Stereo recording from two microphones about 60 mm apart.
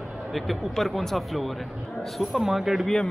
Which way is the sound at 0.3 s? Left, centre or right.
Centre.